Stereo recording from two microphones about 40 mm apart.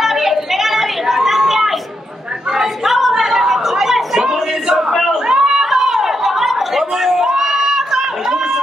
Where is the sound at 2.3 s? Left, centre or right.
Centre.